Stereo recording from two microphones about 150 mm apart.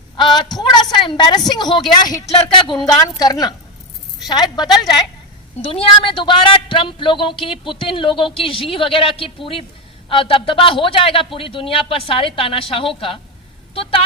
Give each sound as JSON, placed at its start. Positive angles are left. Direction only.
{"t": 0.2, "sound": "a woman's voice", "side_deg": 30}
{"t": 5.6, "sound": "speech", "side_deg": 40}